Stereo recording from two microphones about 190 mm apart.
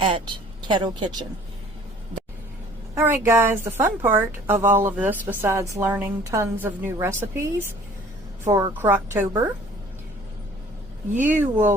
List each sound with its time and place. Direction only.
0.0 s speech: 25° right (ahead or behind)
2.9 s a woman's voice: 15° right (ahead or behind)
11.2 s a woman's voice: 10° right (ahead or behind)